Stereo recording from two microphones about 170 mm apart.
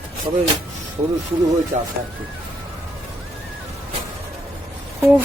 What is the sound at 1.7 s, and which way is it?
Speech, 50° right (ahead or behind).